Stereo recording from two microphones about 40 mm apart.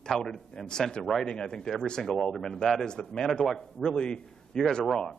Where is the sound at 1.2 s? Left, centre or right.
Centre.